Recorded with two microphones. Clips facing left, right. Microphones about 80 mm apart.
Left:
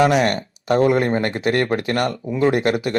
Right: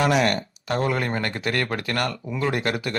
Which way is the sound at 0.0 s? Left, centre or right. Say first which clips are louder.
Left 4 dB; left.